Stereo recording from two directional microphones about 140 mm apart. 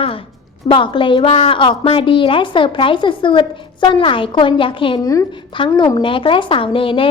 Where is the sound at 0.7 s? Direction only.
35° left (ahead or behind).